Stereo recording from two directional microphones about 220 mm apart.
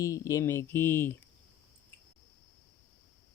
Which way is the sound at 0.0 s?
15° left (ahead or behind).